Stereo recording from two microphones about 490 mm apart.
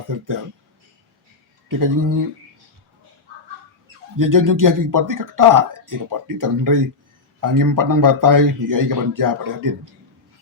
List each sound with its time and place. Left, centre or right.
0.1 s speech: right
1.6 s speech: right
4.2 s speech: right